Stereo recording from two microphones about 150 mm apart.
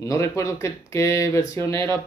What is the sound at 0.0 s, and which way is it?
Speech, 20° left (ahead or behind).